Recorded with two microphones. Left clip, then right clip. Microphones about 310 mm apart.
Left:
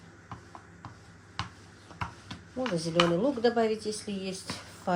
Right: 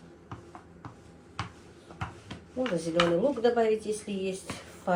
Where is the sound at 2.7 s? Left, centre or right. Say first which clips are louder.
Even; left.